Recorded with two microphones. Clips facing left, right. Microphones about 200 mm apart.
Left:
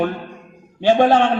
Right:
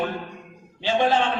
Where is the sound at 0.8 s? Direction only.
50° left (ahead or behind).